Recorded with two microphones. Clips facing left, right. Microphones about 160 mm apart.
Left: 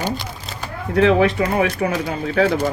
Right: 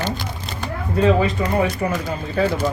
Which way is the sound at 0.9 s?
80° left.